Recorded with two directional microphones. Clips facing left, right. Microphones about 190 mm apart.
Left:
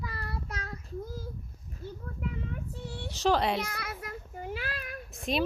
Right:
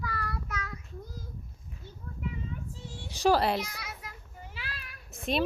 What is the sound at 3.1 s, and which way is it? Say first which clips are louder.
Speech: right 2 dB; 10° right (ahead or behind).